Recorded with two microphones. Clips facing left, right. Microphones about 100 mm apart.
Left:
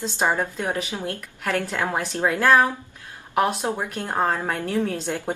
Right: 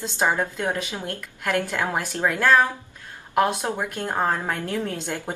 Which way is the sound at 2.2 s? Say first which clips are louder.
Left 1 dB; 15° left (ahead or behind).